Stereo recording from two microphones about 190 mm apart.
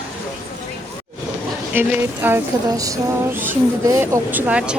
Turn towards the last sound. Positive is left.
turn(degrees=-5)  # may be behind; listen again after turning